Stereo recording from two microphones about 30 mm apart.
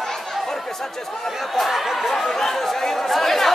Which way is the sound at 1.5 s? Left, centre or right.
Centre.